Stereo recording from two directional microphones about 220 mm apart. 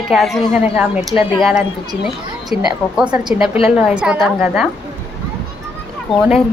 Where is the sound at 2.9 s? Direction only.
5° right (ahead or behind).